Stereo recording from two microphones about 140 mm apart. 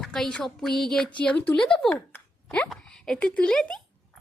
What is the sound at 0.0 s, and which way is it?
A woman's voice, 5° left (ahead or behind).